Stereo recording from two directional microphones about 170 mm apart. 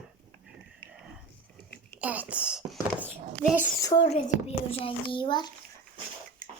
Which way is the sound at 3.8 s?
25° left (ahead or behind).